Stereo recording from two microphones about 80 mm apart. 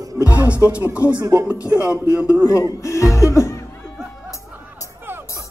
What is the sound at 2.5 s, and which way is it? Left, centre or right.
Music, left.